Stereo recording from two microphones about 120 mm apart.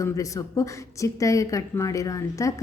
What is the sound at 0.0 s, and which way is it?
A woman's voice, 25° left (ahead or behind).